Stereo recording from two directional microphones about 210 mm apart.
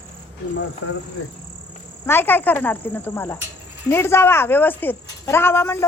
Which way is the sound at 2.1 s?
10° left (ahead or behind).